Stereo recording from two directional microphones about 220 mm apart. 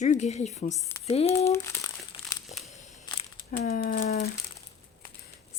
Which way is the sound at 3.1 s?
20° left (ahead or behind).